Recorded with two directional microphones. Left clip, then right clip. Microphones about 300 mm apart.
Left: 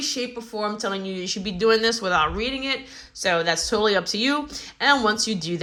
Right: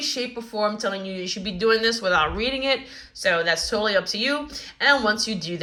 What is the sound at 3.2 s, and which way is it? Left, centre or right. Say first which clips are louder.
Speech: right 1 dB; centre.